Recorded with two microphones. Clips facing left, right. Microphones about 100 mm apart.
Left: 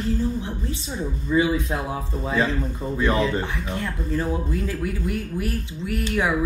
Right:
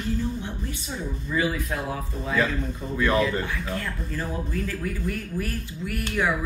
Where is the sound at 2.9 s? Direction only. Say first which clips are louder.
Left 1 dB; 25° left (ahead or behind).